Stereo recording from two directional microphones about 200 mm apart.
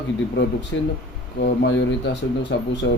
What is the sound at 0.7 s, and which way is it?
Speech, 80° left.